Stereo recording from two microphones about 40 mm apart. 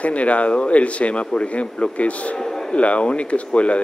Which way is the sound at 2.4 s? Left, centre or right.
Centre.